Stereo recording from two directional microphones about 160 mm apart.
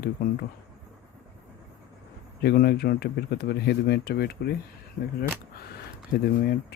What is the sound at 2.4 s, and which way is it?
Speech, 90° left.